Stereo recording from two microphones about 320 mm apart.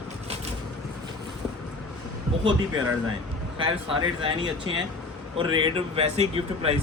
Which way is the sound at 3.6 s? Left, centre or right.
Centre.